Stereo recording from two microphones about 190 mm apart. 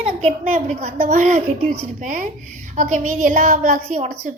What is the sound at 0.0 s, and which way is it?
A woman's voice, 35° right (ahead or behind).